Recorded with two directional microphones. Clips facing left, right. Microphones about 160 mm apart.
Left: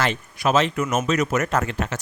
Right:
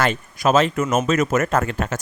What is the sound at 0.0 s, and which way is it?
Speech, 45° right (ahead or behind).